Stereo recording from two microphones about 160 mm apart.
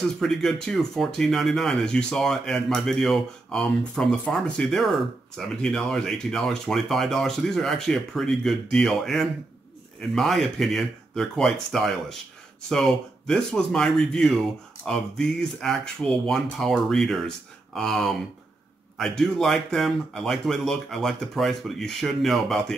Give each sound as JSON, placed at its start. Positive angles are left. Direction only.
{"t": 0.0, "sound": "speech", "side_deg": 5}